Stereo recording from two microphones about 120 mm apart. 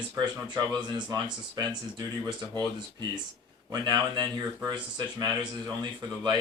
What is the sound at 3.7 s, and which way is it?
Speech, 35° right (ahead or behind).